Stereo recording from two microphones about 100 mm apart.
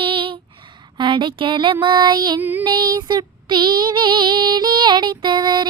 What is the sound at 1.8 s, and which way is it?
Child singing, 50° right (ahead or behind).